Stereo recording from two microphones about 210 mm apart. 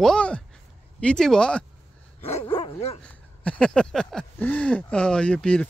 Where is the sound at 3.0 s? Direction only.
5° left (ahead or behind).